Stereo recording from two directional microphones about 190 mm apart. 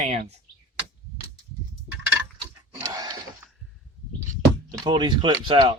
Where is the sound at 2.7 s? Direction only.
20° right (ahead or behind).